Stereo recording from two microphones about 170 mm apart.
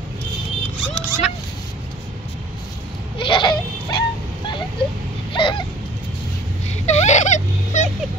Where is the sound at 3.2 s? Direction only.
30° left (ahead or behind).